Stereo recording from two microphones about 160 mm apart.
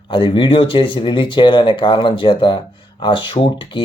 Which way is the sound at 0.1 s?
35° left (ahead or behind).